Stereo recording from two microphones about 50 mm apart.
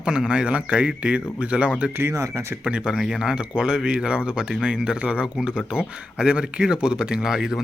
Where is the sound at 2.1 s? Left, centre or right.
Right.